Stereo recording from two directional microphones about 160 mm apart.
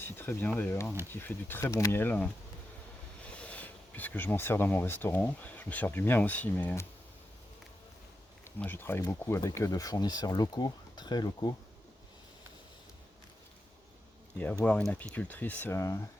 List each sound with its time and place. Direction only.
0.0 s speech: 15° left (ahead or behind)
8.4 s speech: 10° left (ahead or behind)
14.3 s speech: 10° left (ahead or behind)